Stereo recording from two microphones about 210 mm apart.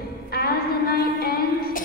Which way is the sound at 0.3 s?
45° left (ahead or behind).